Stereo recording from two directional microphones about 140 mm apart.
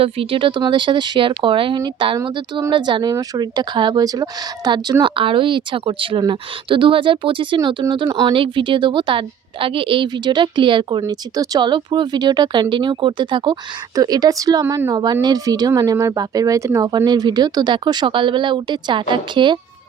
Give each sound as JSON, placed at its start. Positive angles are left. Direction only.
{"t": 0.0, "sound": "speech", "side_deg": -40}